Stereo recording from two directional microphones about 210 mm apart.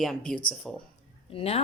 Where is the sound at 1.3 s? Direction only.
30° left (ahead or behind).